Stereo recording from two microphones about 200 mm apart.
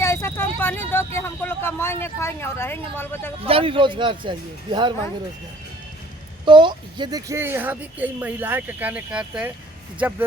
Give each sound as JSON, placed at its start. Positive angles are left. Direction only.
{"t": 0.0, "sound": "speech", "side_deg": 15}
{"t": 3.4, "sound": "speech", "side_deg": -25}
{"t": 6.4, "sound": "speech", "side_deg": -25}